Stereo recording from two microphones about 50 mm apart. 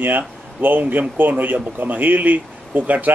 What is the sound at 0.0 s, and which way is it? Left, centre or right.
A man's voice, right.